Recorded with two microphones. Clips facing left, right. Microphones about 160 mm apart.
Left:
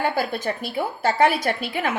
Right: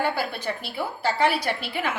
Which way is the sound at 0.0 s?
45° left (ahead or behind).